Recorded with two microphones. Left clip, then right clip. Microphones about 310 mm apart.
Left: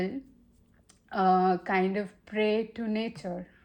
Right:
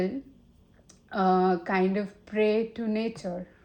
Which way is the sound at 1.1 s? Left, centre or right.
Left.